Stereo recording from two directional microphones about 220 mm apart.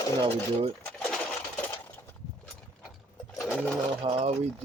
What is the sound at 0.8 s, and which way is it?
Coin, 5° left (ahead or behind).